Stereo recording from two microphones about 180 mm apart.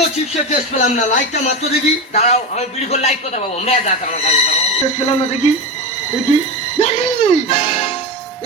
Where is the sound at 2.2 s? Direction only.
35° left (ahead or behind).